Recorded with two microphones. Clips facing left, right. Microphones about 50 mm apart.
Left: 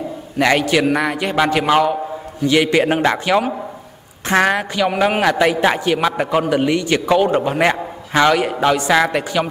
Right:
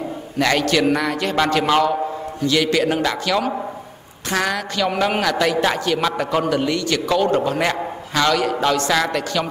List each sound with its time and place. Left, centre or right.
0.4 s a man's voice: centre
2.4 s a man's voice: left
4.7 s a man's voice: centre